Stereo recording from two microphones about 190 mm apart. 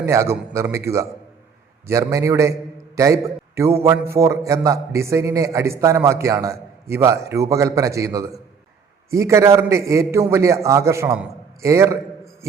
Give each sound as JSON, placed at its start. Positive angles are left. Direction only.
{"t": 0.0, "sound": "a man's voice", "side_deg": -15}